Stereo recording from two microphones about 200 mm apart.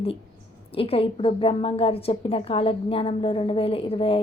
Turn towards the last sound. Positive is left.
turn(degrees=30)  # may be behind; listen again after turning